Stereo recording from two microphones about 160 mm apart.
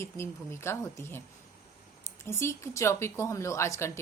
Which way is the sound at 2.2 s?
15° left (ahead or behind).